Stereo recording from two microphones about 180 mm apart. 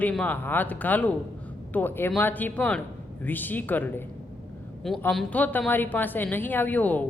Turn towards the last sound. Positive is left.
turn(degrees=10)  # may be behind; listen again after turning